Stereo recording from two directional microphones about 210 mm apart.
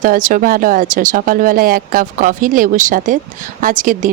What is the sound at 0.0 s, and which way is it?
Speech, 40° right (ahead or behind).